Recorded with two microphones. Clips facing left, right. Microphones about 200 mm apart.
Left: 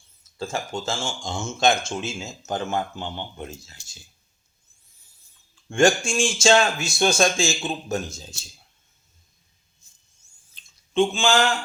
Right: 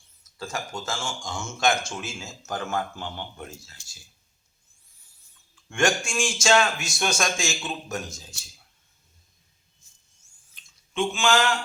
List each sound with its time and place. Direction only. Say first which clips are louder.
0.3 s speech: left 4 dB; 25° left (ahead or behind)
5.6 s speech: left 6 dB; 30° left (ahead or behind)
10.5 s a sound: left 9 dB; 30° left (ahead or behind)